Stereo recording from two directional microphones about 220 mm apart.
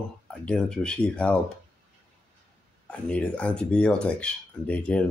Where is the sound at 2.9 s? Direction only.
5° left (ahead or behind).